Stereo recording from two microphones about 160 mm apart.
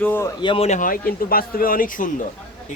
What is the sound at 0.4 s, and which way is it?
Speech, 35° left (ahead or behind).